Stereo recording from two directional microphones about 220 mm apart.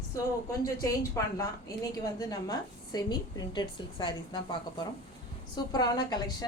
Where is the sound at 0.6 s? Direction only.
15° left (ahead or behind).